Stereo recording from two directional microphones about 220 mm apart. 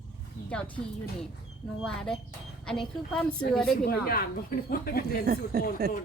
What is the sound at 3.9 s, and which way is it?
Speech, 45° left (ahead or behind).